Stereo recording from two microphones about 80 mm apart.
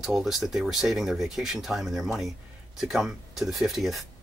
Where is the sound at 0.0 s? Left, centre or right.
Centre.